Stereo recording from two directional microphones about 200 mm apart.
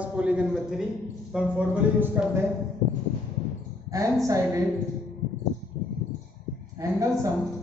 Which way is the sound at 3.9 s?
15° right (ahead or behind).